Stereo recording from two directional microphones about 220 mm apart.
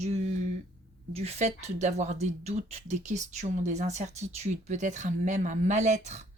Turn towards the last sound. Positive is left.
turn(degrees=-30)  # may be behind; listen again after turning